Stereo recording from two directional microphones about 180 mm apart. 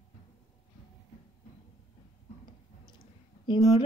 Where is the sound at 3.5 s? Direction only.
25° left (ahead or behind).